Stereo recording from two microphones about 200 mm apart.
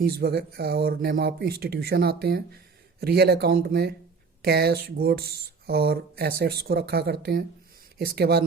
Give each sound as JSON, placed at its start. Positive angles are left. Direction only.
{"t": 0.0, "sound": "speech", "side_deg": -50}